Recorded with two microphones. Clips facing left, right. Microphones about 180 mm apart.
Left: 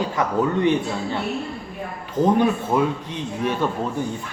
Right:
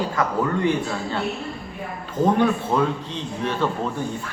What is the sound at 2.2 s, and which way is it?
A man's voice, 15° left (ahead or behind).